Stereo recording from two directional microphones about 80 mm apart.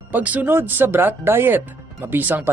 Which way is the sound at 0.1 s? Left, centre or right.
Centre.